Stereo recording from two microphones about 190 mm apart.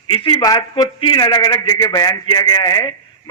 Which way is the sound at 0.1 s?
25° left (ahead or behind).